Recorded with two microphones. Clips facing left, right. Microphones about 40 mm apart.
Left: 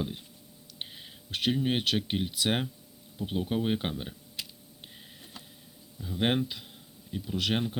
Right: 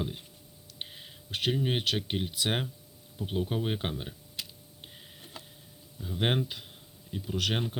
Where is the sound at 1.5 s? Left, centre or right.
Centre.